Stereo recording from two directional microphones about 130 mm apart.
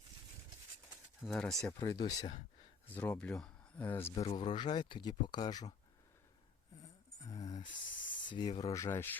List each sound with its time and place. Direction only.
1.2 s speech: 5° left (ahead or behind)
1.8 s speech: 35° left (ahead or behind)
2.9 s speech: 10° left (ahead or behind)
4.1 s speech: 50° left (ahead or behind)
4.4 s speech: 35° left (ahead or behind)
6.8 s a sound: 25° left (ahead or behind)
8.3 s speech: 35° left (ahead or behind); by 9.1 s 20° left (ahead or behind)